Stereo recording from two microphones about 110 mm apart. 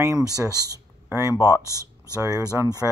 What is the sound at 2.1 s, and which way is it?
Speech, 30° right (ahead or behind).